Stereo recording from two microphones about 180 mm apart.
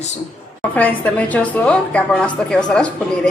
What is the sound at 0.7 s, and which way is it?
A woman's voice, 10° left (ahead or behind).